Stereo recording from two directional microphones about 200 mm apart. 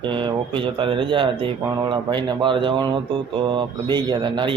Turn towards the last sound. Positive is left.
turn(degrees=-25)  # may be behind; listen again after turning